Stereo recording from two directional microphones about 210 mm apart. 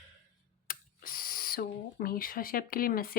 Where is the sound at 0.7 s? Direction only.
40° left (ahead or behind).